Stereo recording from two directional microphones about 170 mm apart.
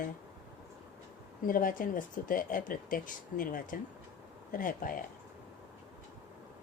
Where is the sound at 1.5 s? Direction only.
55° left (ahead or behind).